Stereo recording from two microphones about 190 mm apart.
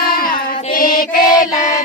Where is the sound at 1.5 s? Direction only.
40° left (ahead or behind).